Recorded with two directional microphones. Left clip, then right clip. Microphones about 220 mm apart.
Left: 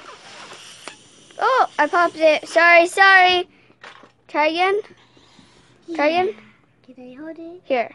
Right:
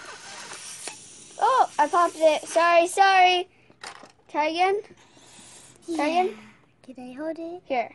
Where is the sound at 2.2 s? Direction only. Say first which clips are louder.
Left 5 dB; 30° left (ahead or behind).